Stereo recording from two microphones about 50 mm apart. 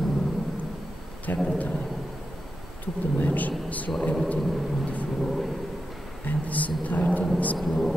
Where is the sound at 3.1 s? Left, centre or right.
Left.